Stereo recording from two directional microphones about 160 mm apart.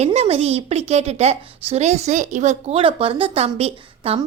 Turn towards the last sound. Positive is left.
turn(degrees=-40)  # may be behind; listen again after turning